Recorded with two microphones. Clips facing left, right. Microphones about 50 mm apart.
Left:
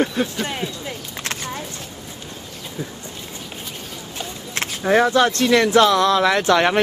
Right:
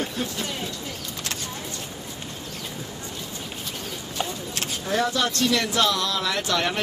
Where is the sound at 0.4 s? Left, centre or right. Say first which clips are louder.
Left 5 dB; left.